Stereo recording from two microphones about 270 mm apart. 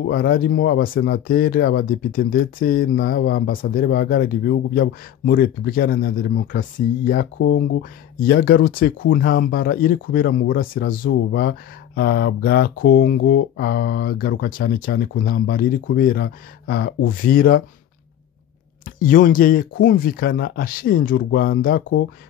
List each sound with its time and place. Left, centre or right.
0.0 s speech: left
7.3 s speech: left
18.9 s speech: left